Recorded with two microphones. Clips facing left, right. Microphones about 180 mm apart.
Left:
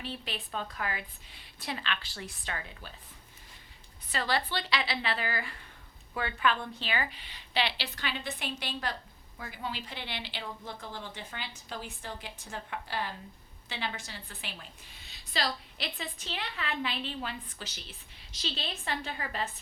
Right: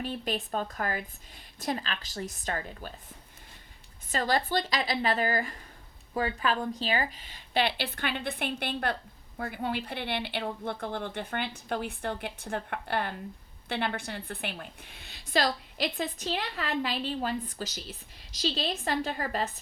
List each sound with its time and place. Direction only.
0.0 s a woman's voice: 45° right (ahead or behind)
4.1 s a woman's voice: 45° right (ahead or behind)